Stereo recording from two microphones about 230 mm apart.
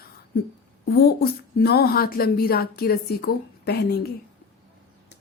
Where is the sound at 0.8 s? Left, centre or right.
Left.